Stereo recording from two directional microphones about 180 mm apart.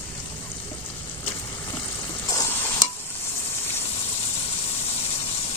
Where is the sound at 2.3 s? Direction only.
15° left (ahead or behind).